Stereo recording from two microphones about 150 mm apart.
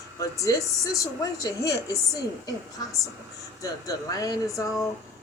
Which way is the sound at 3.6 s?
25° left (ahead or behind).